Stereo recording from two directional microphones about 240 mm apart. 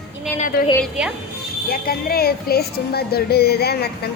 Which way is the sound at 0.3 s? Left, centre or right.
Left.